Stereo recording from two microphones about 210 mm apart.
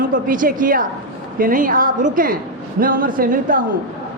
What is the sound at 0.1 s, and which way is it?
A man's voice, 40° right (ahead or behind).